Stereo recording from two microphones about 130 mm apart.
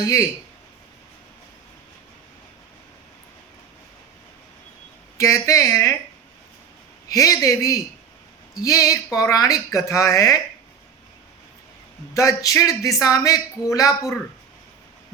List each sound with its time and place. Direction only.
0.0 s speech: 25° left (ahead or behind)
5.1 s speech: 25° left (ahead or behind)
7.1 s speech: 25° left (ahead or behind)
12.1 s speech: 25° left (ahead or behind)